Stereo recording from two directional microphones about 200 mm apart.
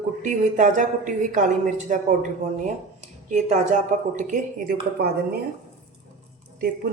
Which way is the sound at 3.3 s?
35° right (ahead or behind).